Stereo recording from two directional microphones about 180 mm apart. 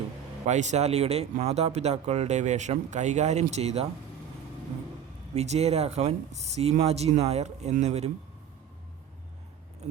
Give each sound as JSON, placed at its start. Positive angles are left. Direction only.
{"t": 0.4, "sound": "speech", "side_deg": -40}
{"t": 5.3, "sound": "speech", "side_deg": -35}